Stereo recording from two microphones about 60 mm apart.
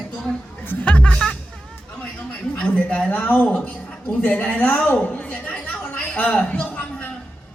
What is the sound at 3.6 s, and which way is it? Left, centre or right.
A man's voice, centre.